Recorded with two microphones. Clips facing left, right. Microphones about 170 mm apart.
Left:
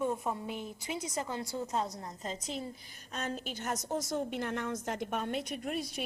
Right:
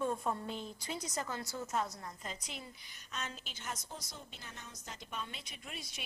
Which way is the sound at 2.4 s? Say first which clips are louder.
Left 9 dB; 35° left (ahead or behind).